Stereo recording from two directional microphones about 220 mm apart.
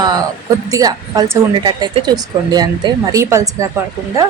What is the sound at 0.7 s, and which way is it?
A woman's voice, 15° right (ahead or behind).